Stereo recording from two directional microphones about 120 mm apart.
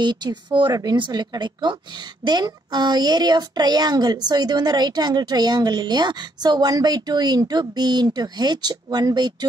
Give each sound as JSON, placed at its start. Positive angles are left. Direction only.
{"t": 0.0, "sound": "a woman's voice", "side_deg": -40}